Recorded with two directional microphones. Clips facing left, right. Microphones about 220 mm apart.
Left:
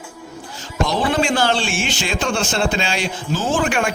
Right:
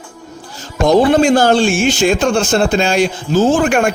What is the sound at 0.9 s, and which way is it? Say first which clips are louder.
Speech: right 11 dB; 45° right (ahead or behind).